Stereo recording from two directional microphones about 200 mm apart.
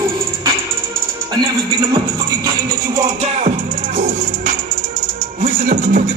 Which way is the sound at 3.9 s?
40° right (ahead or behind).